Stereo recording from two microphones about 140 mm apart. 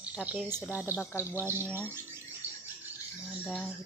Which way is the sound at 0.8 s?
20° left (ahead or behind).